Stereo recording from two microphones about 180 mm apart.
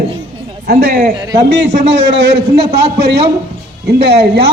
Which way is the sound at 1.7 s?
80° right.